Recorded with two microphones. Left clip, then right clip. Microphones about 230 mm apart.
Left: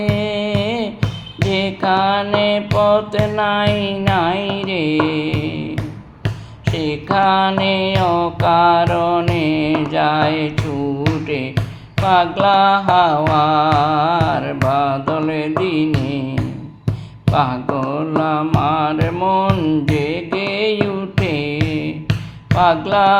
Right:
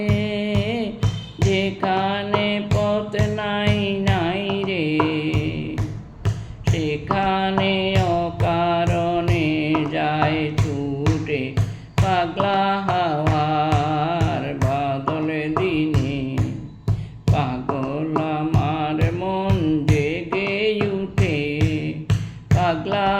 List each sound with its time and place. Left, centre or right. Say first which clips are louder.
0.1 s music: left 5 dB; centre
3.7 s carnatic music: left 5 dB; centre
6.7 s a sound: left 4 dB; centre
7.3 s music: left 5 dB; centre
12.0 s music: left 7 dB; centre
17.2 s music: left 7 dB; centre